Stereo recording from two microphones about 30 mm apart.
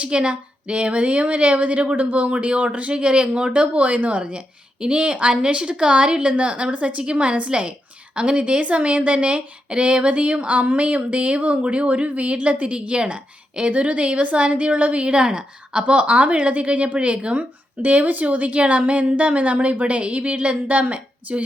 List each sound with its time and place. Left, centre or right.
0.1 s speech: right
2.9 s speech: right
3.6 s speech: right
4.2 s speech: right
6.7 s speech: right
13.7 s speech: right
14.9 s speech: right
15.9 s speech: right
17.8 s speech: right
19.8 s speech: right